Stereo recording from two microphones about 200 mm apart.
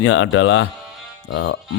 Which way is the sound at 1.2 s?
65° left (ahead or behind).